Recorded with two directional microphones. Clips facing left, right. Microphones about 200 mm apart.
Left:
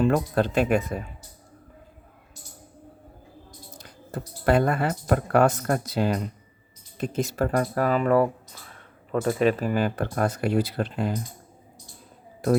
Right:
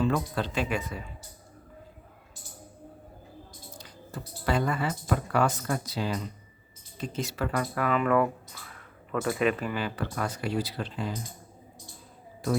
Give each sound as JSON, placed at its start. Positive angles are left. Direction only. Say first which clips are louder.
{"t": 0.0, "sound": "speech", "louder": "left 6 dB", "side_deg": 50}
{"t": 3.8, "sound": "speech", "louder": "left 6 dB", "side_deg": 55}